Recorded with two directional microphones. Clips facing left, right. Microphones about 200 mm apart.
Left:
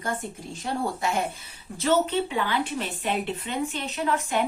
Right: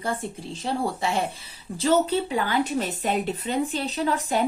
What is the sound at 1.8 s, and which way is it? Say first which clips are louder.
A woman's voice: right 2 dB; 35° right (ahead or behind).